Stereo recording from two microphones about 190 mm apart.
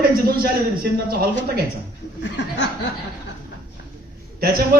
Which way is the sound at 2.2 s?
65° left (ahead or behind).